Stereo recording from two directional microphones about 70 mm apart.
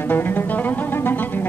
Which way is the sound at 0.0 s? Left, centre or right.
Left.